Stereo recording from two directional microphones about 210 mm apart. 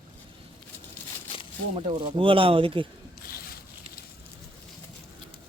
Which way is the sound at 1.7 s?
30° right (ahead or behind).